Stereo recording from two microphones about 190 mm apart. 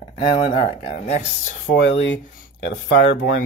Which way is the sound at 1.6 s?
70° left (ahead or behind).